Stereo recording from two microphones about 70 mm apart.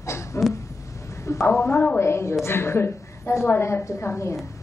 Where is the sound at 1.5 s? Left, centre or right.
Left.